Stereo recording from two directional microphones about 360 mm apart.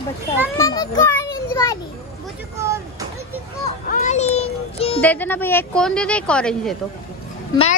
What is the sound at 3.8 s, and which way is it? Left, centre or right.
A child's voice, left.